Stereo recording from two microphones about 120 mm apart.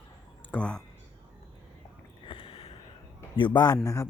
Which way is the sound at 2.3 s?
50° left (ahead or behind).